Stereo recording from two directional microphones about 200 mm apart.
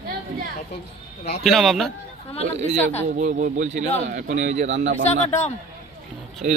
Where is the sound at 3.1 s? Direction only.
40° right (ahead or behind).